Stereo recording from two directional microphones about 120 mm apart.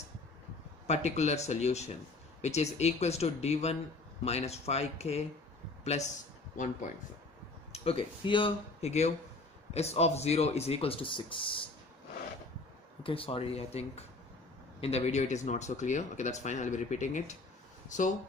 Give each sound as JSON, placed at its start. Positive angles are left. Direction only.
{"t": 0.8, "sound": "speech", "side_deg": 65}
{"t": 5.9, "sound": "speech", "side_deg": 75}
{"t": 7.7, "sound": "speech", "side_deg": 55}
{"t": 8.8, "sound": "speech", "side_deg": 65}
{"t": 13.0, "sound": "speech", "side_deg": 50}